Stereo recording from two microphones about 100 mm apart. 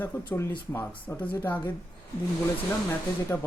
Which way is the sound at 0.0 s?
20° left (ahead or behind).